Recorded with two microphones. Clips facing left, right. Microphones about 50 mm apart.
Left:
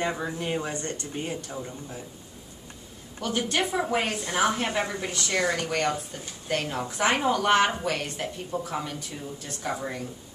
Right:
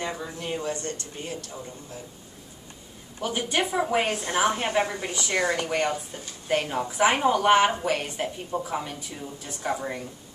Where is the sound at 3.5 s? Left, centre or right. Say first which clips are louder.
Right 3 dB; centre.